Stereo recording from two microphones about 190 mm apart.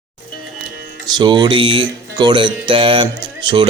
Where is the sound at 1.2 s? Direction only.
25° right (ahead or behind).